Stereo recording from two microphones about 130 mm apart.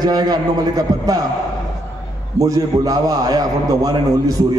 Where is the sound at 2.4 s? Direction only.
25° right (ahead or behind).